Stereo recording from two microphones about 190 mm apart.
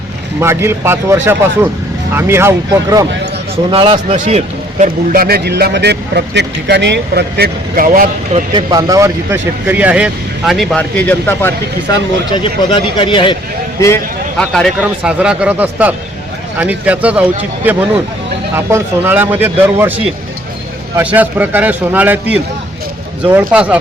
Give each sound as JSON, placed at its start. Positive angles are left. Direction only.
{"t": 0.3, "sound": "a man's voice", "side_deg": -15}
{"t": 3.7, "sound": "speech", "side_deg": -25}
{"t": 4.2, "sound": "a man's voice", "side_deg": -35}
{"t": 5.1, "sound": "speech", "side_deg": -50}
{"t": 8.5, "sound": "speech", "side_deg": -20}
{"t": 12.3, "sound": "speech", "side_deg": 25}
{"t": 13.7, "sound": "speech", "side_deg": 15}
{"t": 14.3, "sound": "a man's voice", "side_deg": 0}
{"t": 20.9, "sound": "a man's voice", "side_deg": -10}